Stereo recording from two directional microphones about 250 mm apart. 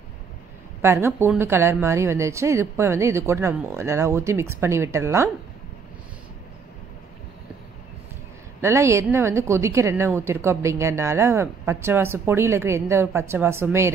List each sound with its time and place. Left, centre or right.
0.8 s a woman's voice: centre
8.5 s a woman's voice: centre